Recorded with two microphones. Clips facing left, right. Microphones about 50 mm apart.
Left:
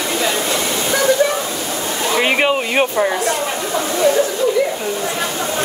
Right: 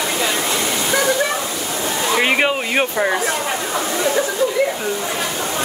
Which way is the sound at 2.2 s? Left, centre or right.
Centre.